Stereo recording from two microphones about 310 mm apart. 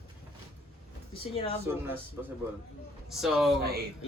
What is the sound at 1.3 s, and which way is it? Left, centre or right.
Speech, centre.